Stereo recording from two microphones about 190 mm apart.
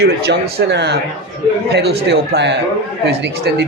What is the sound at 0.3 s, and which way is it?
Speech, 60° right (ahead or behind).